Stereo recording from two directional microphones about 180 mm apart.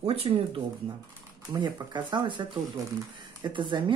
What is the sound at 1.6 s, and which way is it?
Speech, 25° right (ahead or behind).